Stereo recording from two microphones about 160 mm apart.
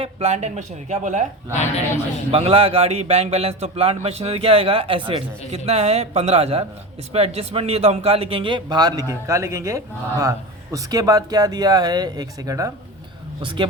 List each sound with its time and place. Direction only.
0.0 s speech: 40° right (ahead or behind)
2.3 s a man's voice: 35° right (ahead or behind)
13.4 s a man's voice: 30° right (ahead or behind)